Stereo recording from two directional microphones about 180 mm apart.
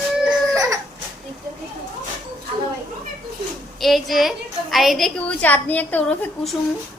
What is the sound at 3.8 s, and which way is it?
A woman's voice, centre (ahead or behind).